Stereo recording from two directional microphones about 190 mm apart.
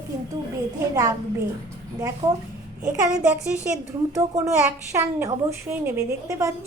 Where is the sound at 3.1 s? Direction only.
5° right (ahead or behind).